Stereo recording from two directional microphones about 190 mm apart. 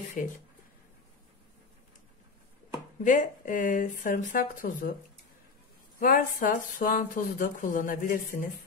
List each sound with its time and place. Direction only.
0.2 s speech: 45° left (ahead or behind)
3.0 s speech: 40° left (ahead or behind)
5.9 s speech: 45° left (ahead or behind)